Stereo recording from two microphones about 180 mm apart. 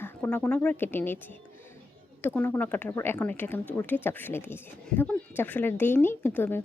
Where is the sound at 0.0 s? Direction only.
10° left (ahead or behind).